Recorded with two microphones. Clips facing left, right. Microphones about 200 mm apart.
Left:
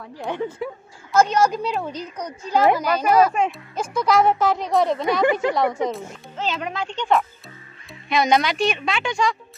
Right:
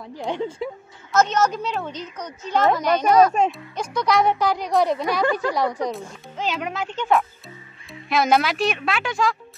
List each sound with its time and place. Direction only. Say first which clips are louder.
0.0 s speech: even; 15° right (ahead or behind)
1.1 s a woman's voice: left 2 dB; 10° left (ahead or behind)
5.2 s speech: left 3 dB; 20° left (ahead or behind)
6.3 s speech: even; 10° right (ahead or behind)